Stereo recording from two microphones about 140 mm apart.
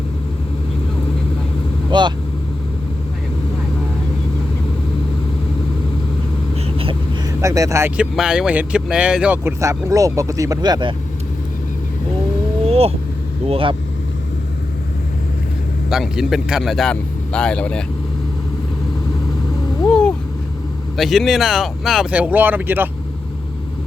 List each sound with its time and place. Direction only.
1.9 s speech: 35° right (ahead or behind)
7.4 s speech: 25° right (ahead or behind)
7.9 s speech: 5° right (ahead or behind); by 10.9 s 30° right (ahead or behind)
12.6 s vehicle: 45° right (ahead or behind)
13.5 s speech: 40° right (ahead or behind)
15.9 s speech: 5° right (ahead or behind)
19.9 s a sound: 10° left (ahead or behind)
20.9 s speech: centre (ahead or behind)